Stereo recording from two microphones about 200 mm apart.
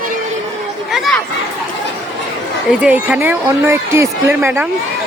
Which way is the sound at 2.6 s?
5° right (ahead or behind).